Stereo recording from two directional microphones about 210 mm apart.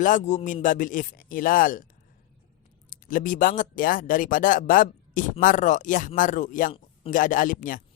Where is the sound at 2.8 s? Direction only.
40° left (ahead or behind).